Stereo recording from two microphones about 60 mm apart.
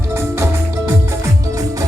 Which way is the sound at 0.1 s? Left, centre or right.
Right.